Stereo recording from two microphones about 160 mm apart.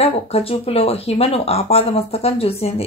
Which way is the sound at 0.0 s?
40° left (ahead or behind).